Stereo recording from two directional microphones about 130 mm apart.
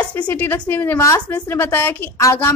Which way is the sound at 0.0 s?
10° left (ahead or behind).